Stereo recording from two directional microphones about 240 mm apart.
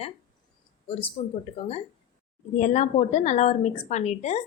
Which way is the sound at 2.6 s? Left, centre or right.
Left.